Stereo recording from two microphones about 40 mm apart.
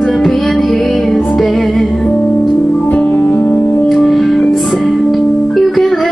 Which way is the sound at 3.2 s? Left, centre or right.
Left.